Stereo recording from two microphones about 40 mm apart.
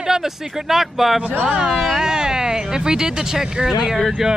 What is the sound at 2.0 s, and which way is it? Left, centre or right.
Speech, centre.